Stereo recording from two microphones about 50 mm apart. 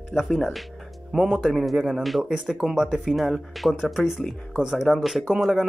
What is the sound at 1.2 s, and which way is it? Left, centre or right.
Speech, centre.